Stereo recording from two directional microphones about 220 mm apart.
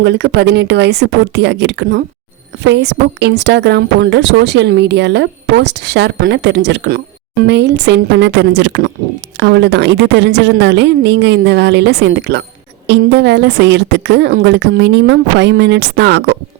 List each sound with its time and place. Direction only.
0.0 s a woman's voice: 50° right (ahead or behind)